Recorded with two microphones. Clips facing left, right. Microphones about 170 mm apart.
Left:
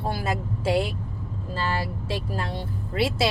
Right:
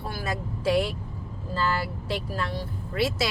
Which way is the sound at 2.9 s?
25° left (ahead or behind).